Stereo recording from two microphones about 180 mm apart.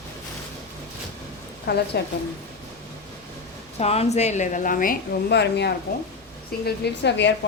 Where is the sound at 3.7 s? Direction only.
35° left (ahead or behind).